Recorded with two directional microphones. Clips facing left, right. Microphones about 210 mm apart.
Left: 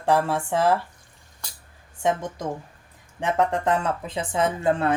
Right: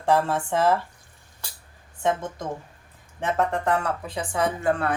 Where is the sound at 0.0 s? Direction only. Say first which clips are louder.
Even; 15° left (ahead or behind).